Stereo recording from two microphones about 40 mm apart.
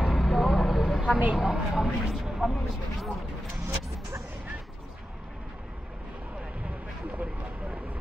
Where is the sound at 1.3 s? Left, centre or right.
Centre.